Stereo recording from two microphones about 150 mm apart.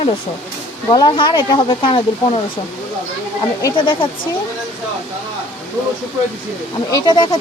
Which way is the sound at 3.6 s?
30° left (ahead or behind).